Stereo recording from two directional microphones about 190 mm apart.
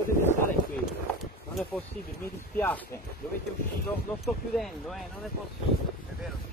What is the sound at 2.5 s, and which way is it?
Speech, 10° left (ahead or behind).